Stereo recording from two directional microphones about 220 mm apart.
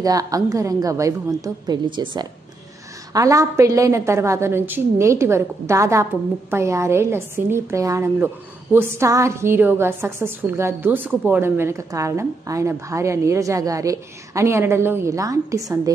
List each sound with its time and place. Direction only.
0.0 s a woman's voice: 15° right (ahead or behind)